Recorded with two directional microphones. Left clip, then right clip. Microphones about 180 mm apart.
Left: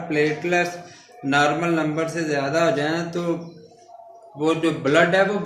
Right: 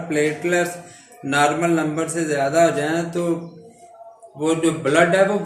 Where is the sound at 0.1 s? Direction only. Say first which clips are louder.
Right 1 dB; 15° left (ahead or behind).